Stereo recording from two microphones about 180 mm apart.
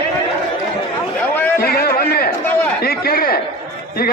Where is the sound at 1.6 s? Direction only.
55° left (ahead or behind).